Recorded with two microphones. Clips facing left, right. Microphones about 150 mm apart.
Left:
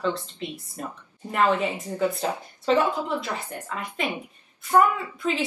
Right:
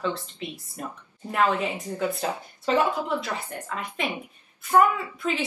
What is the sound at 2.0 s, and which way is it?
Speech, 5° right (ahead or behind).